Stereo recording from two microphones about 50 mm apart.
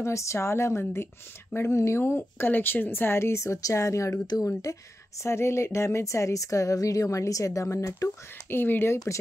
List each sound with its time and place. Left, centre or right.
0.0 s speech: left
1.7 s speech: left
5.2 s speech: left
8.5 s speech: left